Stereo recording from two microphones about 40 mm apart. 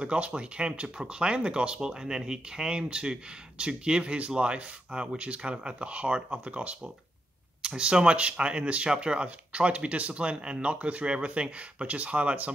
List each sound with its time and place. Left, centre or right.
0.0 s speech: right